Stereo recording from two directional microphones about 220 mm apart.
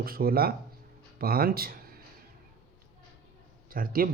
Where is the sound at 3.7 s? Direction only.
40° right (ahead or behind).